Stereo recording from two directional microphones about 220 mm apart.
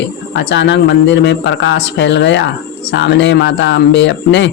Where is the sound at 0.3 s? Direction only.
55° left (ahead or behind).